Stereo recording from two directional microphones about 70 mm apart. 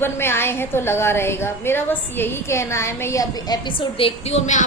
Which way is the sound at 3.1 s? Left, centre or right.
Left.